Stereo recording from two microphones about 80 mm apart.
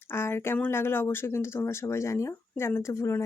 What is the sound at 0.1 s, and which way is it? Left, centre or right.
Speech, left.